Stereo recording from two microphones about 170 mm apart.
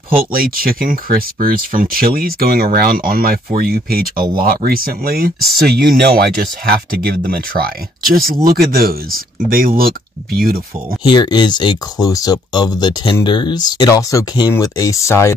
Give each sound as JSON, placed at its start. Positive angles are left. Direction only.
{"t": 0.3, "sound": "speech", "side_deg": -60}
{"t": 11.1, "sound": "speech", "side_deg": 25}